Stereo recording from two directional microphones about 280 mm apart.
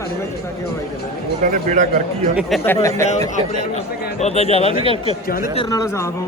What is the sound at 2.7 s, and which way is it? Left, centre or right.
Speech, centre.